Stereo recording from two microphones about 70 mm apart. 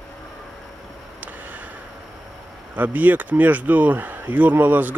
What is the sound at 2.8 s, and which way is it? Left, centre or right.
Speech, right.